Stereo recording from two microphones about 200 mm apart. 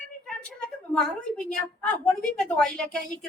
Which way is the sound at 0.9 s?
5° left (ahead or behind).